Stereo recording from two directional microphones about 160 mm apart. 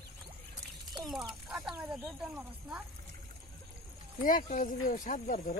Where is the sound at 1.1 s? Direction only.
5° right (ahead or behind).